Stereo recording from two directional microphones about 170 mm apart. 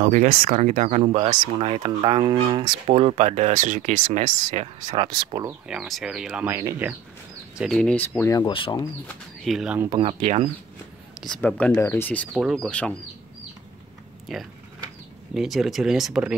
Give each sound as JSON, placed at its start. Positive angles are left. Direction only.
{"t": 0.0, "sound": "speech", "side_deg": -45}
{"t": 1.3, "sound": "speech", "side_deg": -30}
{"t": 4.8, "sound": "speech", "side_deg": -30}
{"t": 5.7, "sound": "speech", "side_deg": 0}
{"t": 7.5, "sound": "speech", "side_deg": 0}
{"t": 8.3, "sound": "speech", "side_deg": 25}
{"t": 9.0, "sound": "speech", "side_deg": 0}
{"t": 9.8, "sound": "speech", "side_deg": -30}
{"t": 11.1, "sound": "speech", "side_deg": 5}
{"t": 14.2, "sound": "speech", "side_deg": 0}